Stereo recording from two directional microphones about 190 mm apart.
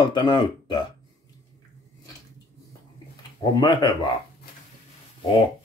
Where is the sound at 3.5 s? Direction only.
25° left (ahead or behind).